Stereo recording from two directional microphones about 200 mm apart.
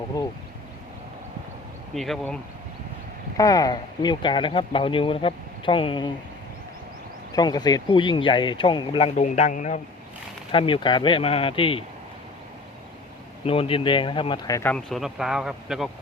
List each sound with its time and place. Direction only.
2.0 s a man's voice: centre (ahead or behind)
3.3 s speech: 15° left (ahead or behind)
7.3 s speech: 20° left (ahead or behind); by 9.8 s 40° left (ahead or behind)
10.5 s speech: 25° left (ahead or behind)
13.4 s speech: 30° left (ahead or behind)
14.7 s a man's voice: 5° left (ahead or behind)